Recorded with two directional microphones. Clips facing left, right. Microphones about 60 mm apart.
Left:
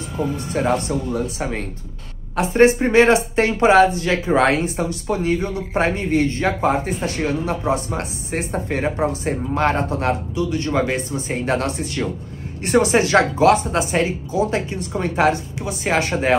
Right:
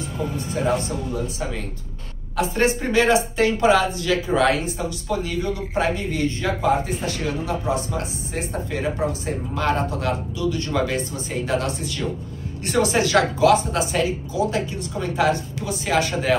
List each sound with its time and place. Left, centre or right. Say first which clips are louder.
0.5 s speech: left 2 dB; left
2.3 s speech: left 6 dB; left